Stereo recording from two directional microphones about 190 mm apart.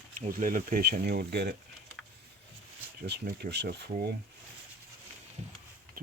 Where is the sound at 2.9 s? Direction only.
60° right (ahead or behind).